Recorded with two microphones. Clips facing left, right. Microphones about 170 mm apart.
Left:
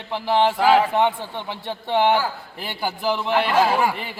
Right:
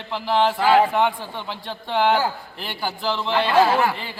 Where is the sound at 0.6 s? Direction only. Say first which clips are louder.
Right 1 dB; 15° left (ahead or behind).